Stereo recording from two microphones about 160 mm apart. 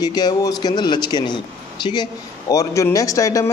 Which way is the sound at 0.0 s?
25° left (ahead or behind).